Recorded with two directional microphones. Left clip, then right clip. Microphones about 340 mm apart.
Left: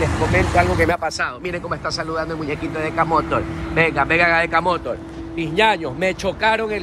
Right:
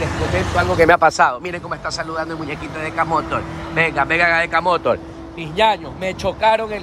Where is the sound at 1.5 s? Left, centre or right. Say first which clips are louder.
Left 1 dB; centre.